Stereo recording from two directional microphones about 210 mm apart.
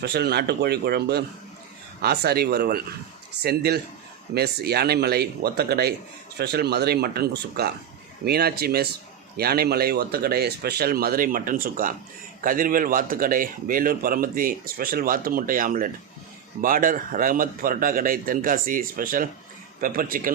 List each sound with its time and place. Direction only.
0.0 s speech: 50° right (ahead or behind)